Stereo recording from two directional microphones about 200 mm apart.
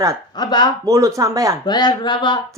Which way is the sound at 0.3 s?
20° left (ahead or behind).